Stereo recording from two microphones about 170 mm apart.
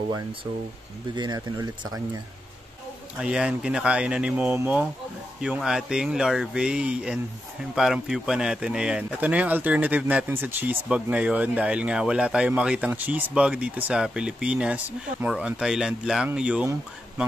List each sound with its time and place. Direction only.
1.1 s speech: 25° right (ahead or behind)
3.2 s speech: 5° right (ahead or behind)